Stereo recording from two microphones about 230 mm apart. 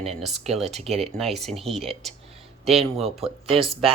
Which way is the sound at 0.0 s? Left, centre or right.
Centre.